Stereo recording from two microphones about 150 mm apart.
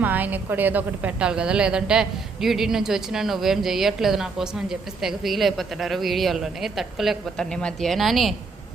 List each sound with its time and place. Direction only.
0.0 s a woman's voice: 10° right (ahead or behind)